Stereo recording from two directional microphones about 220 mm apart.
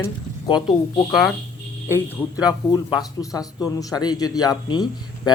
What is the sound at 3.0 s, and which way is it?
Speech, 15° left (ahead or behind).